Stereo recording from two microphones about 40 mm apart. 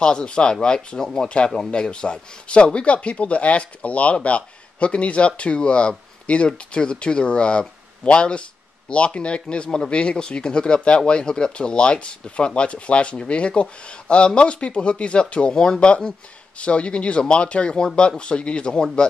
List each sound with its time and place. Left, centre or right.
0.0 s speech: left